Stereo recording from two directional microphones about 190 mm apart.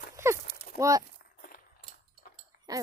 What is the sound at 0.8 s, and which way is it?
Speech, 15° right (ahead or behind).